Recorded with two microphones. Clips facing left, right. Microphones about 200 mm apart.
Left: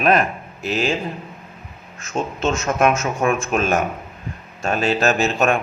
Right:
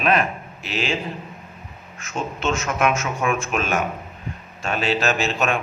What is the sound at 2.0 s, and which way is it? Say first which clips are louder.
Speech: left 4 dB; 40° left (ahead or behind).